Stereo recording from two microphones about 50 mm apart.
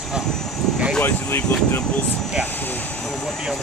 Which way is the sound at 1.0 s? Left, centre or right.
Left.